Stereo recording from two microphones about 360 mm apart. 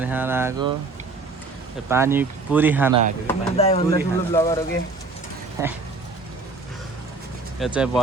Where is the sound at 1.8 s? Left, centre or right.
Centre.